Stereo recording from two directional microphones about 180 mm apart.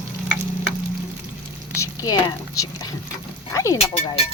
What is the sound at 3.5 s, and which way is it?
Speech, 15° left (ahead or behind).